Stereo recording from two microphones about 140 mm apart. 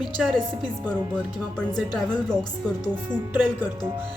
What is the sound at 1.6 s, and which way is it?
Speech, 5° left (ahead or behind).